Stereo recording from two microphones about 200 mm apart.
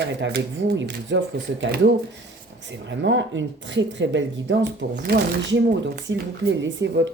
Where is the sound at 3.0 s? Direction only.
65° right (ahead or behind).